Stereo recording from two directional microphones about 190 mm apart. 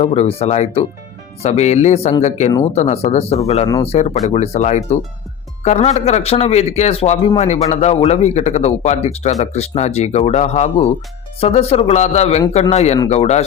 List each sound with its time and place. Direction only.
0.0 s speech: 35° left (ahead or behind)